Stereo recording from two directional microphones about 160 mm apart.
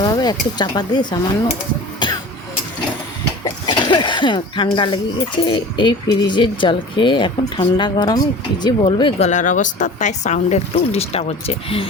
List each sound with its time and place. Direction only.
0.0 s speech: 25° left (ahead or behind)
3.4 s a sound: 30° left (ahead or behind)
5.4 s speech: 30° left (ahead or behind)
9.2 s speech: 50° left (ahead or behind)